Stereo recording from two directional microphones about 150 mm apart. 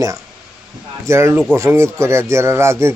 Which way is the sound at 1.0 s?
20° right (ahead or behind).